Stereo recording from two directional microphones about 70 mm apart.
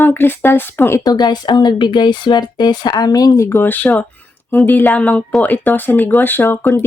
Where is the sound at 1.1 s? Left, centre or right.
Left.